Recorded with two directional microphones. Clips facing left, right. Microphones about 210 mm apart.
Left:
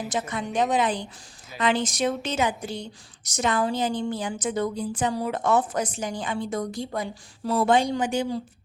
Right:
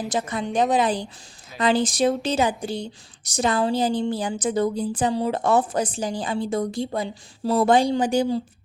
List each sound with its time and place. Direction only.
0.1 s speech: 35° right (ahead or behind)